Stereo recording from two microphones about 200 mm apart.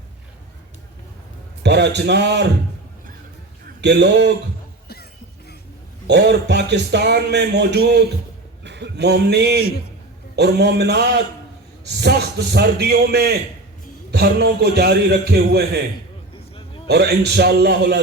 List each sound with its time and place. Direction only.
1.6 s speech: 60° right (ahead or behind)
3.8 s speech: 60° right (ahead or behind)
6.1 s a man's voice: 60° right (ahead or behind)
16.3 s a sound: 25° left (ahead or behind)
16.8 s speech: 55° right (ahead or behind)